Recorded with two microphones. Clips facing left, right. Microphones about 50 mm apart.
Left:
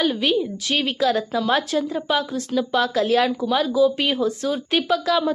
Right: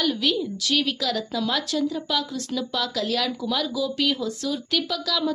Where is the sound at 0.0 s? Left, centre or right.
Left.